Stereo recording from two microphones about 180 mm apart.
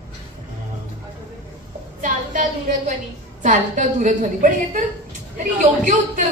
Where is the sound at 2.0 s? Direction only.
45° right (ahead or behind).